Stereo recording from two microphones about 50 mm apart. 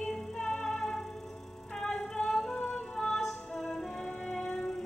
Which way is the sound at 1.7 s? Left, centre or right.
Centre.